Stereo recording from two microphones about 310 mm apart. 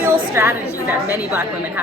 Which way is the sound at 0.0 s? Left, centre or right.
Centre.